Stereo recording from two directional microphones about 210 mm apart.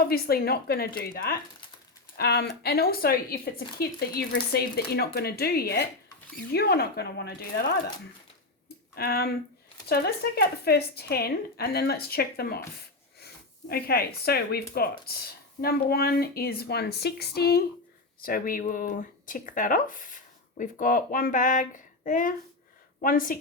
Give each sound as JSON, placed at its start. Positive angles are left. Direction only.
{"t": 0.0, "sound": "speech", "side_deg": 45}
{"t": 9.0, "sound": "speech", "side_deg": 45}